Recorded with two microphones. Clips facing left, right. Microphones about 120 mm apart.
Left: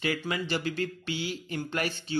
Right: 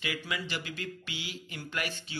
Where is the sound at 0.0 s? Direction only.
40° left (ahead or behind).